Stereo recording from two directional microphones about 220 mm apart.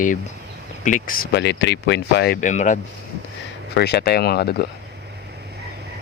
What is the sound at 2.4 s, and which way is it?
Speech, 35° left (ahead or behind).